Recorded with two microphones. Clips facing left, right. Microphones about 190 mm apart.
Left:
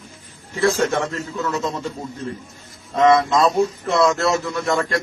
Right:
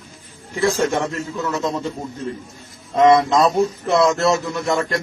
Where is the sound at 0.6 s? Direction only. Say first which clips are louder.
Even; 10° right (ahead or behind).